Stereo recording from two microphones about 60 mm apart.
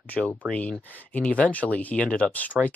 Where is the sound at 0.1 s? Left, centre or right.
Left.